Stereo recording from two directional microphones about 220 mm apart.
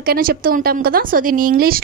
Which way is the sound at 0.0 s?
45° right (ahead or behind).